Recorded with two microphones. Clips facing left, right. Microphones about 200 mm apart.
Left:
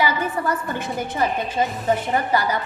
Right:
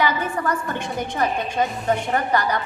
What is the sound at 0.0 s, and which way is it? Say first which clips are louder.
A woman's voice: even; 10° left (ahead or behind).